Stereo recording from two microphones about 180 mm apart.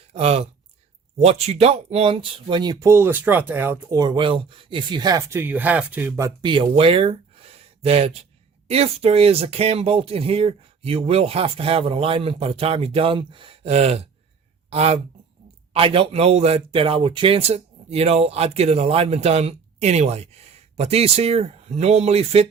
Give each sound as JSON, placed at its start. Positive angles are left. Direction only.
{"t": 0.1, "sound": "speech", "side_deg": -35}